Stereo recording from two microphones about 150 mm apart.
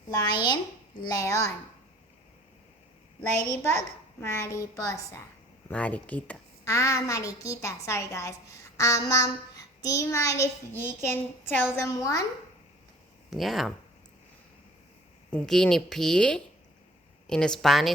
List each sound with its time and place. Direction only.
0.1 s a woman's voice: 25° left (ahead or behind)
4.2 s a woman's voice: 20° left (ahead or behind)
5.6 s speech: 10° left (ahead or behind)
6.7 s a woman's voice: 20° left (ahead or behind)
13.3 s speech: centre (ahead or behind)
15.3 s speech: 5° left (ahead or behind)